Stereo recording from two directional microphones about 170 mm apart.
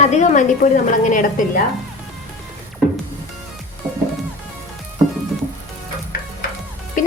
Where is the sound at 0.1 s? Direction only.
45° left (ahead or behind).